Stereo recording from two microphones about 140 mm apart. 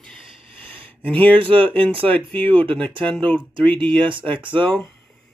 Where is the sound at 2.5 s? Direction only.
40° right (ahead or behind).